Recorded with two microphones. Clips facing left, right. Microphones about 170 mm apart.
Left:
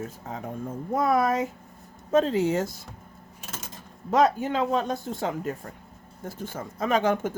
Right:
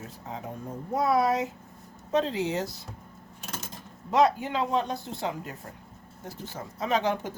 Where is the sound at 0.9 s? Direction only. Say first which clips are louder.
Left 1 dB; 50° left (ahead or behind).